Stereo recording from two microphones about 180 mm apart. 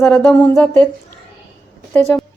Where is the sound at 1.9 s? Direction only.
10° left (ahead or behind).